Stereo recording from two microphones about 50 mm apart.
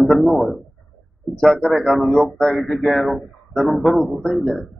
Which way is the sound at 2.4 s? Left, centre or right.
Centre.